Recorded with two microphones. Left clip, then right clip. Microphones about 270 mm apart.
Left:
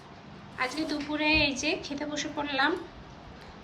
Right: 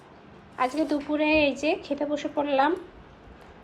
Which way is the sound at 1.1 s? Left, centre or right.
Left.